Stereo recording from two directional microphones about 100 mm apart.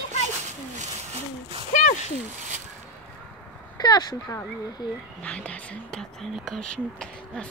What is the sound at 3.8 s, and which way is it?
Speech, 45° left (ahead or behind).